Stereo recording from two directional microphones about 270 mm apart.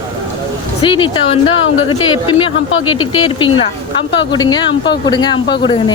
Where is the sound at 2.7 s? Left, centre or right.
Left.